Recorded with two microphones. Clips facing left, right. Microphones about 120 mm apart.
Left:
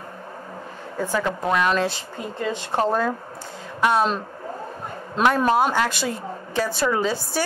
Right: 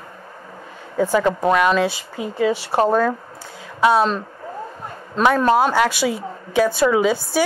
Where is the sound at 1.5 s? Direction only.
Centre (ahead or behind).